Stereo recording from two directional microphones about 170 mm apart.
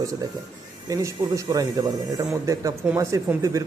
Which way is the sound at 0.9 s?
20° right (ahead or behind).